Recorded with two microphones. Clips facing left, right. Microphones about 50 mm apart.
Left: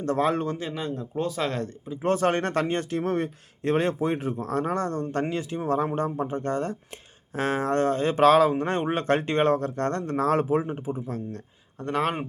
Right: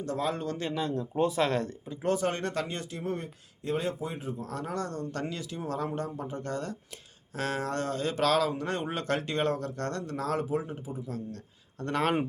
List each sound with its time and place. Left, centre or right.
0.0 s speech: left
0.8 s speech: centre
1.4 s speech: centre
2.1 s speech: left
3.0 s speech: left
4.4 s speech: left
11.8 s speech: centre